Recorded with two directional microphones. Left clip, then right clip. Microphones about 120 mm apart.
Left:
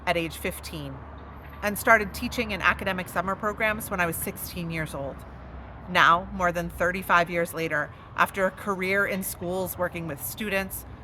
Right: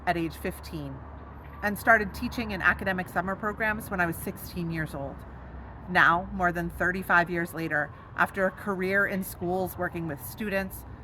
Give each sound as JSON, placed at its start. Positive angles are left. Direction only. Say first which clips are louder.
{"t": 0.0, "sound": "speech", "louder": "left 2 dB", "side_deg": 15}